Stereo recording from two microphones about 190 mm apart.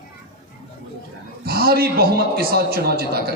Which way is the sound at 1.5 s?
55° right (ahead or behind).